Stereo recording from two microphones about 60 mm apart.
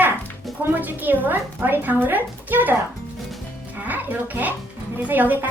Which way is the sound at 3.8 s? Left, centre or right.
Right.